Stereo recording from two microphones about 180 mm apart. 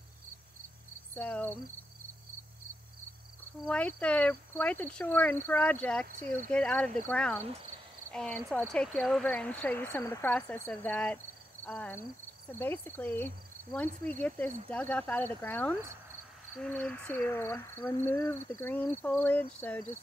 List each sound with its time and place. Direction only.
1.1 s speech: 10° left (ahead or behind)
3.6 s speech: 5° left (ahead or behind)
6.1 s speech: 45° right (ahead or behind)
6.5 s speech: 5° left (ahead or behind)